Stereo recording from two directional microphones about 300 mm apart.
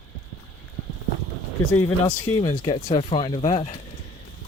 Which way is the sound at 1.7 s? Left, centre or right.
Centre.